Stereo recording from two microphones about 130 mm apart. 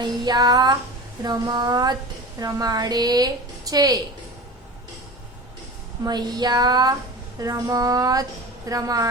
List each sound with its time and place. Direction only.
0.0 s child singing: 30° right (ahead or behind)
2.4 s a woman's voice: 30° right (ahead or behind)
6.1 s child singing: 30° right (ahead or behind)
7.3 s a woman's voice: 25° right (ahead or behind)